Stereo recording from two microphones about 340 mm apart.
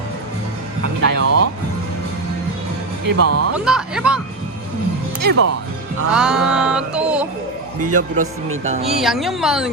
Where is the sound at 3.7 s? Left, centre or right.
Centre.